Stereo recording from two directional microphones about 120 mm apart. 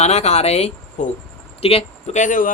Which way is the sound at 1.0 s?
90° left.